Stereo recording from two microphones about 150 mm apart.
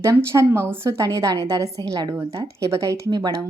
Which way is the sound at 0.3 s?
20° right (ahead or behind).